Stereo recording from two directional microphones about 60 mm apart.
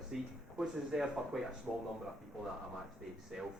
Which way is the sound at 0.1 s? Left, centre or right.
Centre.